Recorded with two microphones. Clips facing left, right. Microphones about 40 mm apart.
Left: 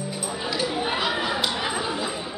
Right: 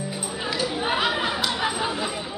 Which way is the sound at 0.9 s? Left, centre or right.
Centre.